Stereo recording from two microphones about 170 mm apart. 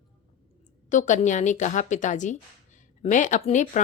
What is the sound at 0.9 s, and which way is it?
Speech, 45° left (ahead or behind).